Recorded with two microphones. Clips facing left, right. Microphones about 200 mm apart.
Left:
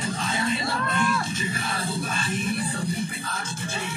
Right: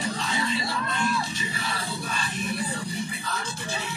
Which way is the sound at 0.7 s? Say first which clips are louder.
Left 2 dB; 55° left (ahead or behind).